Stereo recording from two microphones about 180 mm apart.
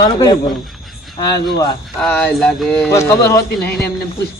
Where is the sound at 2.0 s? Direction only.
5° left (ahead or behind).